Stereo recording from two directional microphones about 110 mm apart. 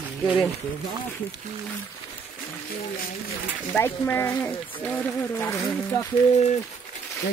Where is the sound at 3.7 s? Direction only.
20° left (ahead or behind).